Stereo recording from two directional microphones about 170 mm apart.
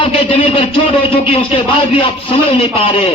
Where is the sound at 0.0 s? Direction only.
35° left (ahead or behind).